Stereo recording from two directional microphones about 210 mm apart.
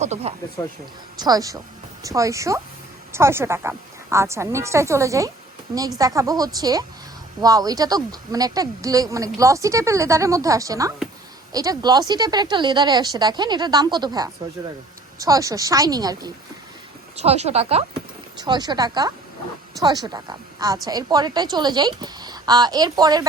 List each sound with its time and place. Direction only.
0.0 s speech: 30° right (ahead or behind)
1.1 s a woman's voice: 20° right (ahead or behind)
17.2 s a woman's voice: 30° right (ahead or behind)